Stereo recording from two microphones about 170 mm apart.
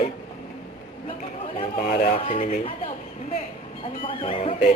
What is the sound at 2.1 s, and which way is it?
Speech, 35° left (ahead or behind).